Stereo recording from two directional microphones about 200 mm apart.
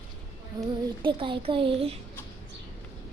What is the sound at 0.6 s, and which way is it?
A child's voice, 20° right (ahead or behind).